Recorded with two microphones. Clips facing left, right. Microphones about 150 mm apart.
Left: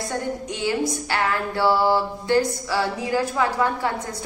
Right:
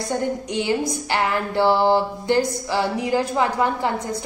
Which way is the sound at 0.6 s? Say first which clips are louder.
Right 1 dB; 20° right (ahead or behind).